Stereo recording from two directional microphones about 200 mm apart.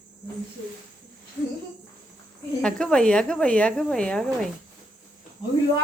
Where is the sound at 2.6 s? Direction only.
5° left (ahead or behind).